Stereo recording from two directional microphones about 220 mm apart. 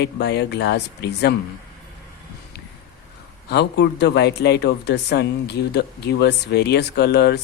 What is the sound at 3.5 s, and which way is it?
Speech, 50° left (ahead or behind).